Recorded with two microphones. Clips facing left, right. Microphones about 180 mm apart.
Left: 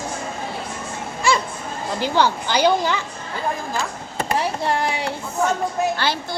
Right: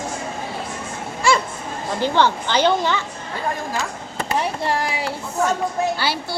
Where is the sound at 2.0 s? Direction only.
10° left (ahead or behind).